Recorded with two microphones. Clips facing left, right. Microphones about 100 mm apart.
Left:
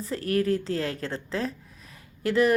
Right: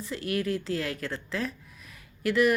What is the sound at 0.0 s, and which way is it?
Speech, 35° left (ahead or behind).